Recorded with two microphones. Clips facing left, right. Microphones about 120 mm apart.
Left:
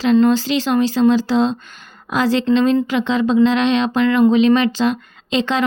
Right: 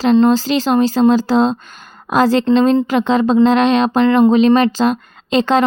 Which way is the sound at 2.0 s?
45° right (ahead or behind).